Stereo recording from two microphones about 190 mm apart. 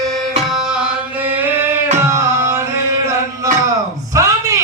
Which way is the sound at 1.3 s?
10° right (ahead or behind).